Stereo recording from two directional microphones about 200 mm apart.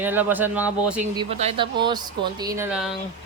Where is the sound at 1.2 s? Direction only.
30° right (ahead or behind); by 3.0 s 5° right (ahead or behind).